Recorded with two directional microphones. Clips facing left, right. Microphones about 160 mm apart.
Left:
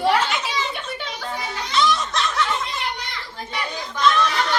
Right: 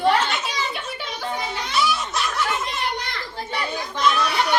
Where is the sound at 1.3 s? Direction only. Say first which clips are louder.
Right 2 dB; 10° right (ahead or behind).